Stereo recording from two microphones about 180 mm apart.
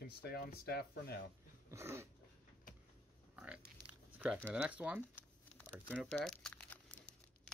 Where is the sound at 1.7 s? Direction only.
15° right (ahead or behind).